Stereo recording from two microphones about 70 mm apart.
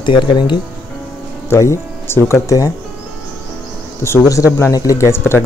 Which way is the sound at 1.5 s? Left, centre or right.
Left.